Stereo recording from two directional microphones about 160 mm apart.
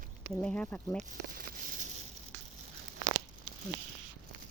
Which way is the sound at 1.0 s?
60° right (ahead or behind).